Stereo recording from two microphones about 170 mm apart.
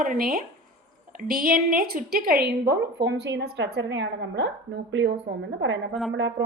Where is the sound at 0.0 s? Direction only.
55° right (ahead or behind); by 5.8 s 90° right.